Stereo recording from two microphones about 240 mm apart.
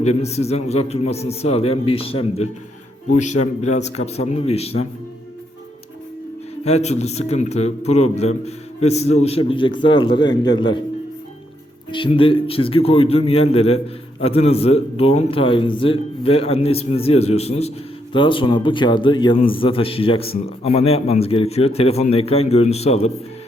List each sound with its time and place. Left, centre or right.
0.0 s a man's voice: left
6.7 s a man's voice: left
11.9 s a man's voice: left